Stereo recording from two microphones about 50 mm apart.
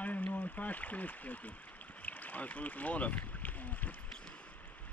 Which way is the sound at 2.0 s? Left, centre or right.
Left.